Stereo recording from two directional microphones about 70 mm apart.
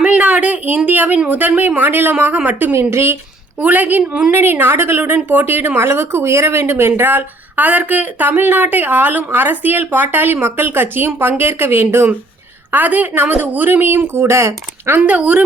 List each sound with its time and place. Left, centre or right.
0.0 s a sound: centre
0.9 s speech: right
2.7 s a woman's voice: right
3.6 s speech: right
4.0 s a woman's voice: centre
4.3 s a woman's voice: right
15.0 s speech: right